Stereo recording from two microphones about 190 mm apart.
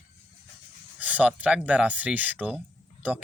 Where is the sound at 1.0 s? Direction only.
5° right (ahead or behind).